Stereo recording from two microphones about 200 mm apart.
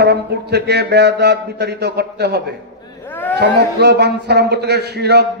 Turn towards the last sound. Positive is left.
turn(degrees=-55)  # may be behind; listen again after turning